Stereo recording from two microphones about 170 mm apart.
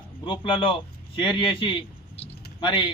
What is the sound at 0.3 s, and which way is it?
A man's voice, 30° left (ahead or behind).